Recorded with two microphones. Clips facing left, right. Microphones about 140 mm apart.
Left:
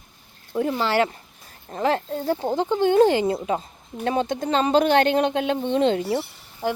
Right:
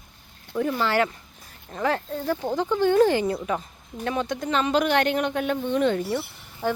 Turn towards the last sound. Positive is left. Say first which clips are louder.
# even
turn(degrees=15)  # may be behind; listen again after turning